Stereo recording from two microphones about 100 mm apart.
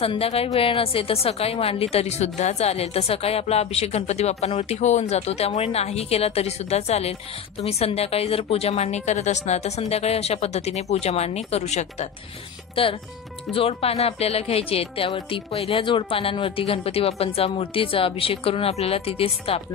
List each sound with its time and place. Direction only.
0.0 s a woman's voice: 75° left (ahead or behind); by 12.1 s 90° left
12.8 s speech: 65° left (ahead or behind)